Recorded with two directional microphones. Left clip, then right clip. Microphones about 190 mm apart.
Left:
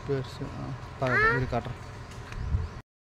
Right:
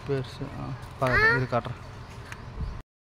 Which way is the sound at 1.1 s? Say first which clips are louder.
Right 2 dB; 35° right (ahead or behind).